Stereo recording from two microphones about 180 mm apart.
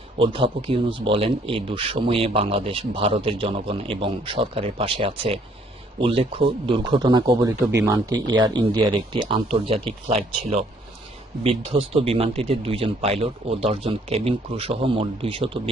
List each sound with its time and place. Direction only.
0.2 s speech: 30° right (ahead or behind)